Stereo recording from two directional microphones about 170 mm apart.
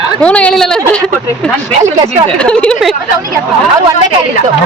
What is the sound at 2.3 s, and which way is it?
Speech, 5° left (ahead or behind).